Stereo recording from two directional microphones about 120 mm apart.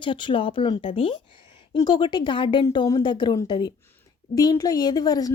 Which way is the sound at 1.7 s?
35° left (ahead or behind).